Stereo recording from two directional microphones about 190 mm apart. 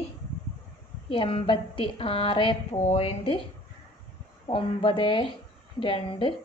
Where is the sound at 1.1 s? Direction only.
25° left (ahead or behind).